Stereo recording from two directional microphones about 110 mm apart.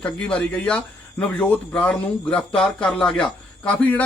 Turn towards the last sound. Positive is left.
turn(degrees=15)  # may be behind; listen again after turning